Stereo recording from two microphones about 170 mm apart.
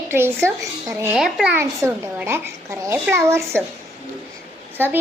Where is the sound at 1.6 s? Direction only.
15° right (ahead or behind).